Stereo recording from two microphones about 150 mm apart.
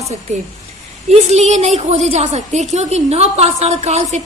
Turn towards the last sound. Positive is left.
turn(degrees=-45)  # may be behind; listen again after turning